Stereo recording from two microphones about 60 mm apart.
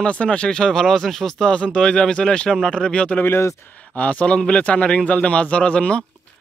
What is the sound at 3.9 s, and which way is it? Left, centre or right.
A man's voice, left.